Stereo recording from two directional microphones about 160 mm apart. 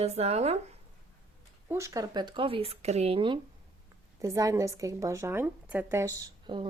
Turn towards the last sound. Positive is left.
turn(degrees=-30)  # may be behind; listen again after turning